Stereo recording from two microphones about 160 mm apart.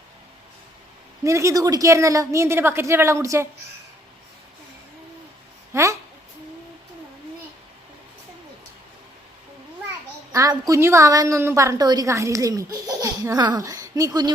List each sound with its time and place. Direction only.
1.2 s a woman's voice: 20° right (ahead or behind)
5.7 s a sound: 20° right (ahead or behind)
10.3 s a woman's voice: 20° right (ahead or behind)